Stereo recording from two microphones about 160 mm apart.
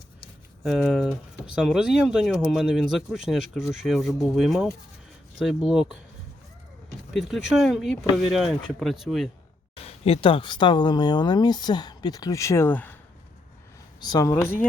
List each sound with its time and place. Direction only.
0.6 s speech: centre (ahead or behind)
7.1 s speech: centre (ahead or behind)
9.8 s speech: 40° left (ahead or behind); by 13.0 s 10° left (ahead or behind)
14.0 s speech: 25° left (ahead or behind)